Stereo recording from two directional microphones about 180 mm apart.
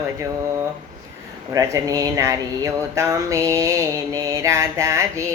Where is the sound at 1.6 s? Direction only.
20° right (ahead or behind).